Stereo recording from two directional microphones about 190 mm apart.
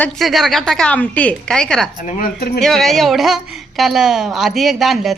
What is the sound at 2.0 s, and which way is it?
Speech, 45° left (ahead or behind).